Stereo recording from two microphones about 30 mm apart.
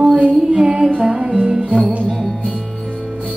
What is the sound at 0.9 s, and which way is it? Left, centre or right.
Music, right.